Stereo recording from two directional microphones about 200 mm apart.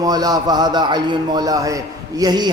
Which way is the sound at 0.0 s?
20° right (ahead or behind).